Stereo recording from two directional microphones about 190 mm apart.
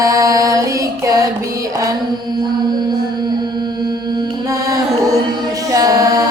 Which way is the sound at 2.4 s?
20° right (ahead or behind).